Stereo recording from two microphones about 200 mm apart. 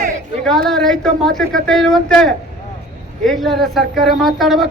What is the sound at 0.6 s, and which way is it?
A woman's voice, centre (ahead or behind).